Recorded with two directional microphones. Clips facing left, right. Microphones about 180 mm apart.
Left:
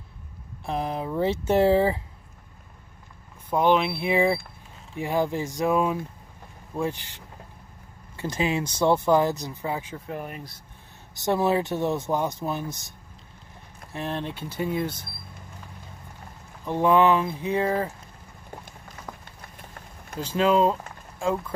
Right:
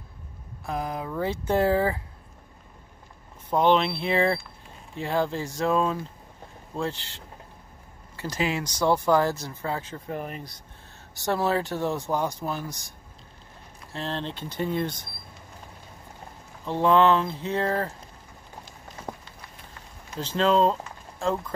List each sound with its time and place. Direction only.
0.7 s speech: 25° left (ahead or behind)
3.5 s speech: 10° left (ahead or behind)
8.2 s speech: 20° left (ahead or behind)
10.0 s speech: centre (ahead or behind)
11.1 s speech: 20° left (ahead or behind)
13.9 s speech: 15° left (ahead or behind)
16.6 s speech: 15° left (ahead or behind)
19.1 s a sound: 25° right (ahead or behind)
20.2 s speech: 10° left (ahead or behind)